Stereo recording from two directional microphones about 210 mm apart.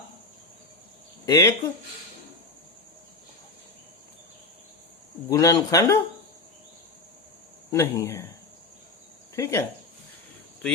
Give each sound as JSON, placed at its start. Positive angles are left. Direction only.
{"t": 1.2, "sound": "speech", "side_deg": 15}
{"t": 5.3, "sound": "a man's voice", "side_deg": 15}
{"t": 7.7, "sound": "a man's voice", "side_deg": 15}
{"t": 9.3, "sound": "speech", "side_deg": 15}